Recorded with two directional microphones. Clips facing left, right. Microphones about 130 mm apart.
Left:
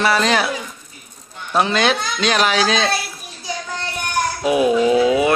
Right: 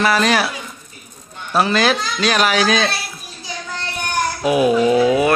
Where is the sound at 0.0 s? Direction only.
25° left (ahead or behind).